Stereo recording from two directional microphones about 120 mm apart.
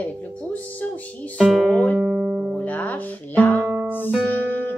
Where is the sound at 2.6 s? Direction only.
15° left (ahead or behind).